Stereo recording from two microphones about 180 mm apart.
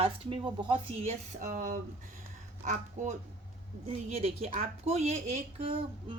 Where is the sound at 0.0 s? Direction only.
30° right (ahead or behind).